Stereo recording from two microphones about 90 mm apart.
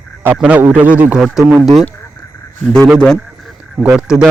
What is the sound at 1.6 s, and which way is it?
Speech, centre (ahead or behind).